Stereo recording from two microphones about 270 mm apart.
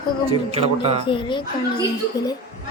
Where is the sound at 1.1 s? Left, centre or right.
Centre.